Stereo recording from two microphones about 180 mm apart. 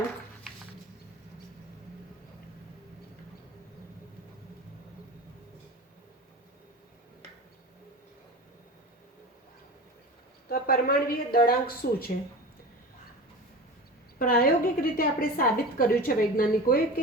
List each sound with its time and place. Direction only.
10.5 s speech: 60° left (ahead or behind)
14.2 s a woman's voice: 55° left (ahead or behind)